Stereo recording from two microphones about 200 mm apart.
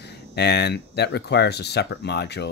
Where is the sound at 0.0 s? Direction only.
55° left (ahead or behind).